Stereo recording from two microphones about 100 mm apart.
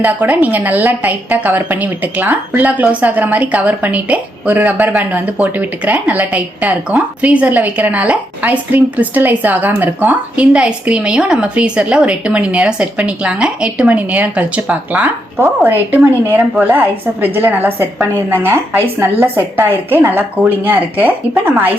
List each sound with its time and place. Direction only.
0.0 s a woman's voice: 15° right (ahead or behind)